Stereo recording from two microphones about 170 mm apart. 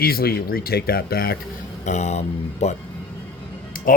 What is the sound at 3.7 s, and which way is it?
Music, 55° left (ahead or behind).